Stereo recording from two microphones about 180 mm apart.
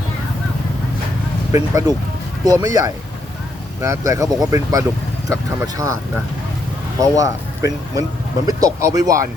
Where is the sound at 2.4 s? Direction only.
20° right (ahead or behind).